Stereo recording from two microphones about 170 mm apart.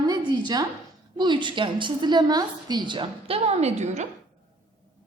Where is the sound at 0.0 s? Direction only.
25° right (ahead or behind).